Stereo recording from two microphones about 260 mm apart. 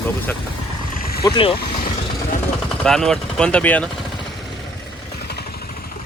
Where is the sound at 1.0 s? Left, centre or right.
Left.